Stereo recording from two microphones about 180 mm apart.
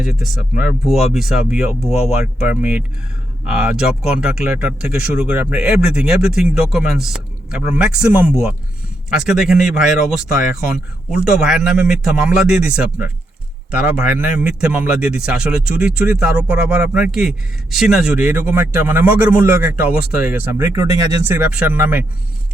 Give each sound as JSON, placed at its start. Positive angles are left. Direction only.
{"t": 0.0, "sound": "a man's voice", "side_deg": 0}